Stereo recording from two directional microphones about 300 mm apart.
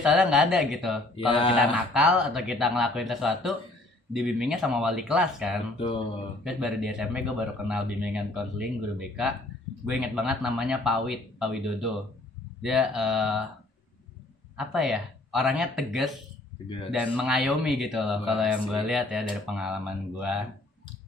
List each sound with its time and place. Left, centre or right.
0.0 s speech: centre
1.1 s speech: centre
1.5 s speech: centre
14.5 s speech: centre